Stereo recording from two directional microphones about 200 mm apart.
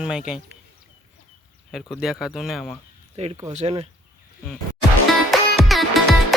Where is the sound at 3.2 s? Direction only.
35° right (ahead or behind).